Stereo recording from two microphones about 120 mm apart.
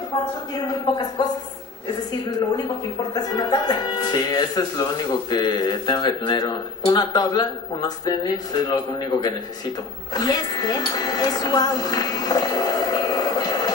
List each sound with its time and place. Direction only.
0.1 s speech: 35° left (ahead or behind)
2.5 s speech: 35° left (ahead or behind)